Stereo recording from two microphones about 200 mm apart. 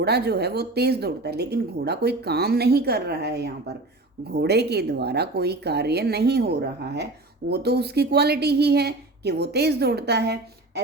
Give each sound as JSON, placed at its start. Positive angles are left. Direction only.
{"t": 0.0, "sound": "a woman's voice", "side_deg": -55}